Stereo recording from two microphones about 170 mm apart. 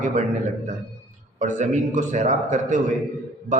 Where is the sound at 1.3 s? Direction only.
45° right (ahead or behind).